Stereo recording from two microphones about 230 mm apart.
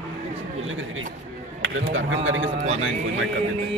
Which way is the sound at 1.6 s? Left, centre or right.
Right.